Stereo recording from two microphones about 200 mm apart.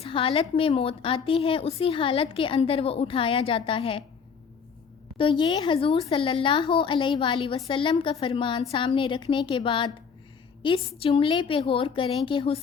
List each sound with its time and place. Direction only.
0.0 s speech: 25° left (ahead or behind)
5.1 s speech: 25° left (ahead or behind)
10.9 s speech: 25° left (ahead or behind)